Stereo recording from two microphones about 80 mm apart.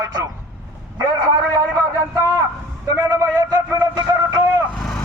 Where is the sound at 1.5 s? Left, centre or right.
Right.